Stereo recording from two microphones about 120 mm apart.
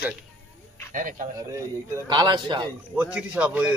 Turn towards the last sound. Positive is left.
turn(degrees=-10)  # may be behind; listen again after turning